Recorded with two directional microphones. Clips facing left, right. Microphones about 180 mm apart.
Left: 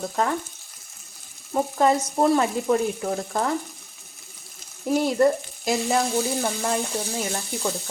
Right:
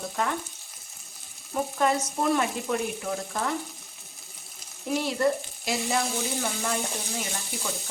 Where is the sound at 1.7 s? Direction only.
35° left (ahead or behind).